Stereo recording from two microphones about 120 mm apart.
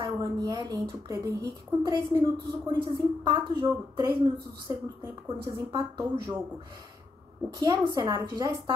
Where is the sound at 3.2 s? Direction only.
40° right (ahead or behind).